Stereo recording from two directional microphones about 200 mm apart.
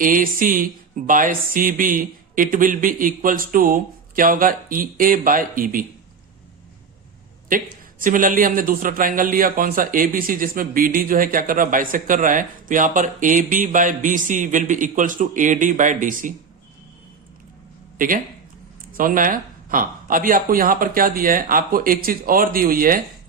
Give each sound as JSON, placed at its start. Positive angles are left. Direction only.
{"t": 0.0, "sound": "a man's voice", "side_deg": -45}
{"t": 7.5, "sound": "a man's voice", "side_deg": -45}
{"t": 17.9, "sound": "a sound", "side_deg": -45}
{"t": 18.9, "sound": "a man's voice", "side_deg": -45}